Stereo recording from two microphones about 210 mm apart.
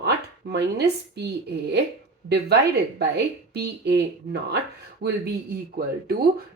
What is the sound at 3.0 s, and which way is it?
Speech, 50° right (ahead or behind).